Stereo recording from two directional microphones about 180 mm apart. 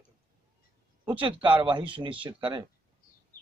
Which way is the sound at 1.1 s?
30° right (ahead or behind).